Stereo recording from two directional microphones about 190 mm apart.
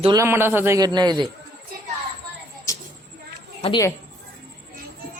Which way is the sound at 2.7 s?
15° left (ahead or behind).